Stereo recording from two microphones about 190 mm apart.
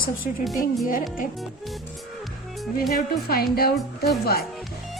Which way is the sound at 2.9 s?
55° left (ahead or behind).